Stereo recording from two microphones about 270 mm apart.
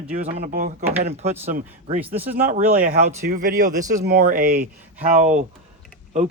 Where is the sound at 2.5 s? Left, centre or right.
Right.